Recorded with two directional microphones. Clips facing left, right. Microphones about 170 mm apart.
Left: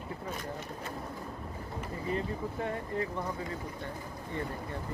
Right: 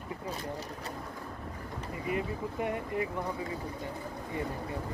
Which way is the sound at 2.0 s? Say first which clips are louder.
Right 1 dB; 15° right (ahead or behind).